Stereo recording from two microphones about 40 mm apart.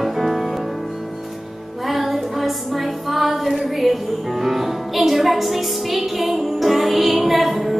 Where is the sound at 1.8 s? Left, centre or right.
Centre.